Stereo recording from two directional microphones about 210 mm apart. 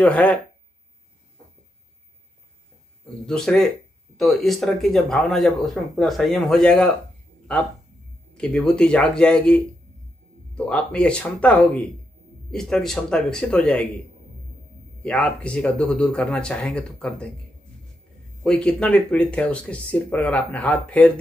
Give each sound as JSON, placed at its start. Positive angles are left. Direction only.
{"t": 0.0, "sound": "speech", "side_deg": 5}
{"t": 3.3, "sound": "speech", "side_deg": 5}
{"t": 8.4, "sound": "speech", "side_deg": 5}
{"t": 15.0, "sound": "speech", "side_deg": 5}
{"t": 18.4, "sound": "speech", "side_deg": 5}